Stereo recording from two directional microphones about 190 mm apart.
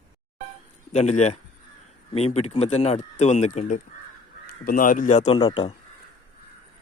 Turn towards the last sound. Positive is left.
turn(degrees=25)  # may be behind; listen again after turning